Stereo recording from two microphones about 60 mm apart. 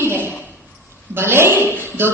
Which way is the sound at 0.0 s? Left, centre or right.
Right.